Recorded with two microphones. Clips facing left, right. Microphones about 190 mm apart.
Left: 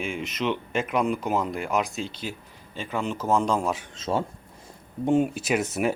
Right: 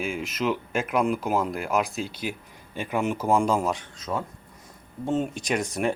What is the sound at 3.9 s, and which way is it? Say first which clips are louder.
Speech: left 4 dB; 25° left (ahead or behind).